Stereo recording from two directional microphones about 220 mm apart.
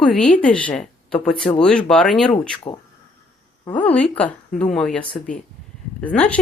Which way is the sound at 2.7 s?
20° left (ahead or behind).